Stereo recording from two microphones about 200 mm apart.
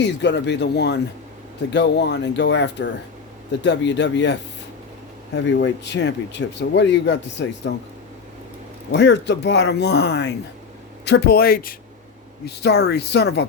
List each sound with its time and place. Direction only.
0.0 s speech: 60° left (ahead or behind)
8.9 s speech: 60° left (ahead or behind)